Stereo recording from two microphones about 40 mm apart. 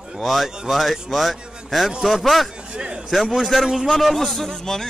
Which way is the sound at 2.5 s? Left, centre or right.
Right.